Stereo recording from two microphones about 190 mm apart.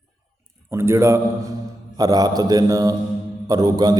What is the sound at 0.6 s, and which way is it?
A man's voice, 15° right (ahead or behind).